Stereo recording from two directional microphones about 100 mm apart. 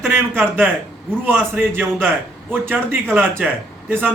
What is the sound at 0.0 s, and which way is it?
A man's voice, 25° right (ahead or behind).